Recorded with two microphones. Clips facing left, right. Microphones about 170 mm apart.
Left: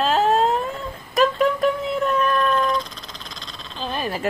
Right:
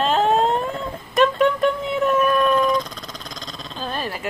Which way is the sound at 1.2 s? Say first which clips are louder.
Right 1 dB; centre (ahead or behind).